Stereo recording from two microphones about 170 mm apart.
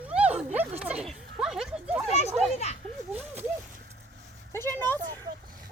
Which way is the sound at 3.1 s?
10° right (ahead or behind).